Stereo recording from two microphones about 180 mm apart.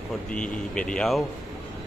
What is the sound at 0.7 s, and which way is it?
Speech, 5° left (ahead or behind).